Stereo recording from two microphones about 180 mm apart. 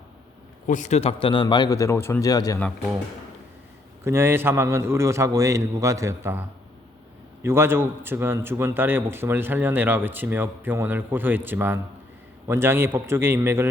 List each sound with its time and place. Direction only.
0.7 s a man's voice: 40° left (ahead or behind); by 2.6 s 20° left (ahead or behind)
4.0 s a man's voice: 15° right (ahead or behind)
7.4 s a man's voice: 15° right (ahead or behind)